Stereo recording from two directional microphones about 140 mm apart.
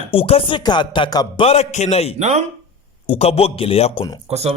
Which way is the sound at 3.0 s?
45° left (ahead or behind).